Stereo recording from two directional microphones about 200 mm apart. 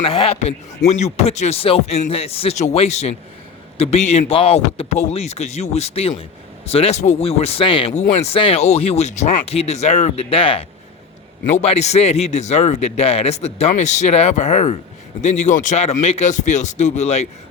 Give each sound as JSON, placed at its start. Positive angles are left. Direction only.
{"t": 0.0, "sound": "a man's voice", "side_deg": 30}